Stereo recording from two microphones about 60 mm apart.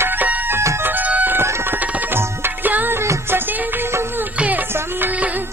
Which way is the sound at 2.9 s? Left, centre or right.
Right.